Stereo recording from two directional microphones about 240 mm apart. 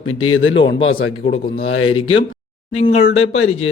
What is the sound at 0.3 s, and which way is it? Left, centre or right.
Speech, left.